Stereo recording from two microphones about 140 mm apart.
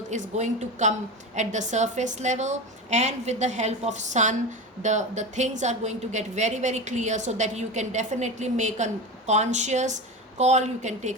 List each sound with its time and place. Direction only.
0.1 s a woman's voice: 60° right (ahead or behind)